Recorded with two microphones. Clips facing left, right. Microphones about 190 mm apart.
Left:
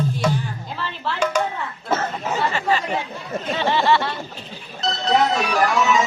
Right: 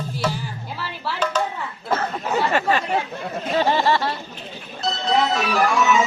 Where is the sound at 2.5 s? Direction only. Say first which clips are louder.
Right 2 dB; 60° right (ahead or behind).